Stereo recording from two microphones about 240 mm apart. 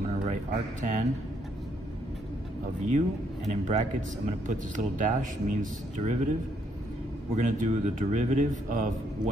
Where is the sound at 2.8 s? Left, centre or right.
Right.